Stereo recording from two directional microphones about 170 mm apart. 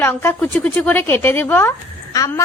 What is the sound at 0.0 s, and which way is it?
A woman's voice, 15° left (ahead or behind).